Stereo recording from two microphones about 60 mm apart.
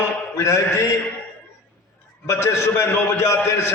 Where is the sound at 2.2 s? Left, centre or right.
Left.